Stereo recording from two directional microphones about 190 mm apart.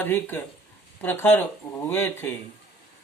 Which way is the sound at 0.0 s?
10° left (ahead or behind).